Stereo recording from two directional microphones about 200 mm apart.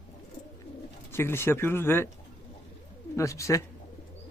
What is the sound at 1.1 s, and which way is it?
Speech, 10° left (ahead or behind).